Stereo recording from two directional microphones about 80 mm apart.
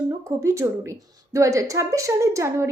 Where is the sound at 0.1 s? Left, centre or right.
Right.